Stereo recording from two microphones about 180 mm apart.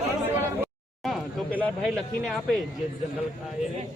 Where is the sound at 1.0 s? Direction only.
Centre (ahead or behind).